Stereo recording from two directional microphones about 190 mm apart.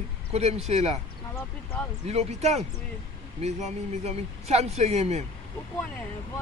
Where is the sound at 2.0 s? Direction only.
35° right (ahead or behind).